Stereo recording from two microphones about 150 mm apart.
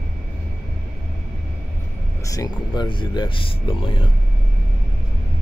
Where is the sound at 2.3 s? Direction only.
25° left (ahead or behind).